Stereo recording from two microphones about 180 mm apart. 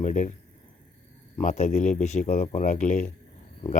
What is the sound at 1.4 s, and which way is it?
A man's voice, 45° left (ahead or behind).